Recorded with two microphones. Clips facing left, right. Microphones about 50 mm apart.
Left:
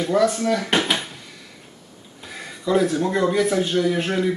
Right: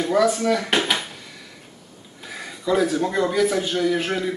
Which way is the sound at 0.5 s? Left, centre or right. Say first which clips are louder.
Even; centre.